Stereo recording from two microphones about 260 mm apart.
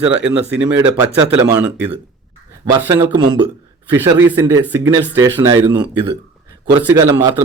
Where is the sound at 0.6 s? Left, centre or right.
Centre.